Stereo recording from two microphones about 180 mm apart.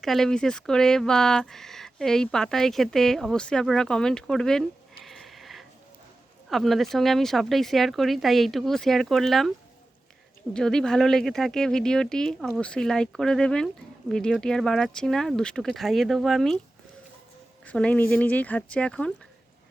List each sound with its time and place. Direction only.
0.0 s speech: centre (ahead or behind)
5.0 s a sound: centre (ahead or behind)
6.5 s speech: centre (ahead or behind)
10.5 s speech: 5° left (ahead or behind)
17.7 s speech: 5° left (ahead or behind)